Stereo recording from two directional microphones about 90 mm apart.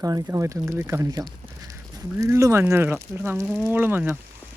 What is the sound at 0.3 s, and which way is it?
Speech, 35° right (ahead or behind).